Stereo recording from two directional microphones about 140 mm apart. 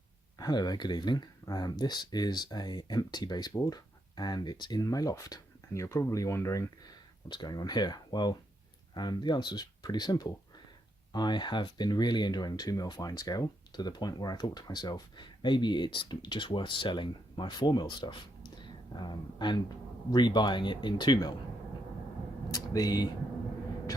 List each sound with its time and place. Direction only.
0.3 s speech: 30° left (ahead or behind)
22.5 s speech: 25° left (ahead or behind)